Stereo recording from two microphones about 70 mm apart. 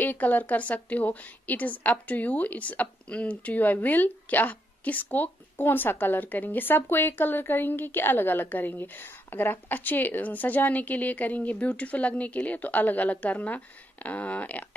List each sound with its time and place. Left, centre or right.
0.0 s a woman's voice: left